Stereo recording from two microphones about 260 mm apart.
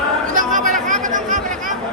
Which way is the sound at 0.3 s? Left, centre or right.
Right.